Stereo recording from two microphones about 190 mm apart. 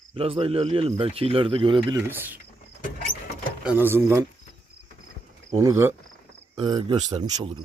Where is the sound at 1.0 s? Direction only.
30° right (ahead or behind).